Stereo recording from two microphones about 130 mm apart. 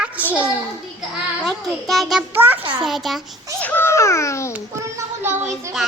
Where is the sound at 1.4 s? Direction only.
Centre (ahead or behind).